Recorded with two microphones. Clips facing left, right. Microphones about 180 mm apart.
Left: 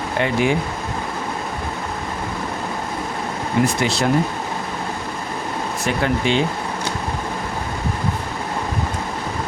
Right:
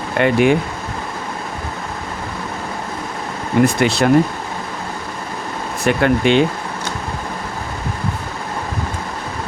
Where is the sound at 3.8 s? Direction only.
60° right (ahead or behind).